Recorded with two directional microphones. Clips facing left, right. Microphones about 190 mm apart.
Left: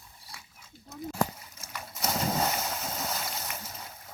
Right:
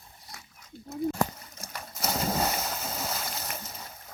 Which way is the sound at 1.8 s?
Centre (ahead or behind).